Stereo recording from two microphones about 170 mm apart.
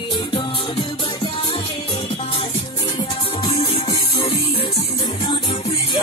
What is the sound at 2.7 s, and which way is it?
Music, 20° left (ahead or behind).